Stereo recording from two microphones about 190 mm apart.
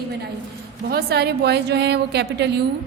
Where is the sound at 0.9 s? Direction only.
55° right (ahead or behind).